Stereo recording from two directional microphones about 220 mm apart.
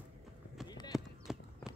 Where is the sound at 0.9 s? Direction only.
Centre (ahead or behind).